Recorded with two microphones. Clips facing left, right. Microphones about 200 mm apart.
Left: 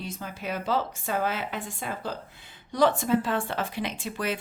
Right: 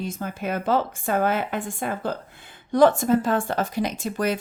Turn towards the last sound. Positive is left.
turn(degrees=-45)  # may be behind; listen again after turning